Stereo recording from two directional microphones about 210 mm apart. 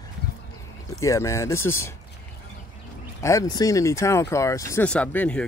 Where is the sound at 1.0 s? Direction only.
15° left (ahead or behind).